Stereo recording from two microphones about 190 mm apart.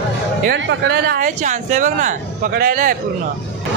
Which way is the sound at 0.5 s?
60° right (ahead or behind).